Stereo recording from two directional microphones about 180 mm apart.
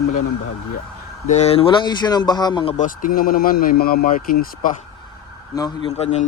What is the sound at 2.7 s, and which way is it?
Speech, 45° left (ahead or behind).